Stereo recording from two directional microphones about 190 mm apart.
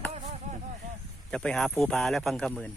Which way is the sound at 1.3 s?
5° left (ahead or behind).